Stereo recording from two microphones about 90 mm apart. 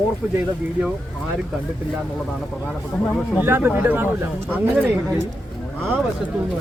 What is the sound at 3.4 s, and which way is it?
Speech, 25° right (ahead or behind).